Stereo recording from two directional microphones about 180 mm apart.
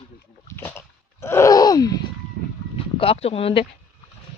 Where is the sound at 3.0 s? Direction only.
35° left (ahead or behind).